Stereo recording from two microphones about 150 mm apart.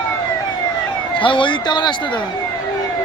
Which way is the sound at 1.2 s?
35° left (ahead or behind).